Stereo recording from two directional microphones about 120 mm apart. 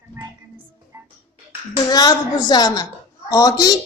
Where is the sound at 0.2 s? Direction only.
25° right (ahead or behind).